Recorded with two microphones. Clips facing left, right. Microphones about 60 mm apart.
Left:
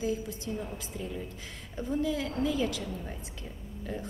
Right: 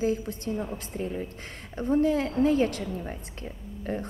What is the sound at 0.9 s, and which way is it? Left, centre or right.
A woman's voice, right.